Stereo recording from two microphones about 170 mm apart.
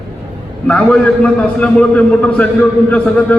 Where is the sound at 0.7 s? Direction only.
5° left (ahead or behind).